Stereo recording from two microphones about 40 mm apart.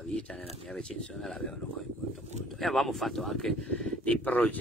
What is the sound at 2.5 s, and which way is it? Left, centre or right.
Speech, centre.